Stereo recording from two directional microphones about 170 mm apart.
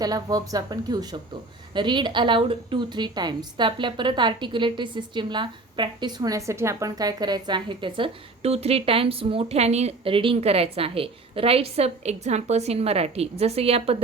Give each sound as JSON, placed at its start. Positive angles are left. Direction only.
{"t": 0.0, "sound": "a woman's voice", "side_deg": -20}